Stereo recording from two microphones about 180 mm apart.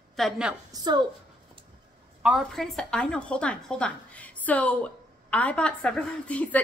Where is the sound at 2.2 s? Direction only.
Centre (ahead or behind).